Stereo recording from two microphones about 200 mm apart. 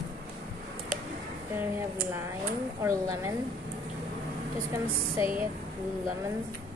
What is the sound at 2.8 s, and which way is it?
Speech, 15° right (ahead or behind).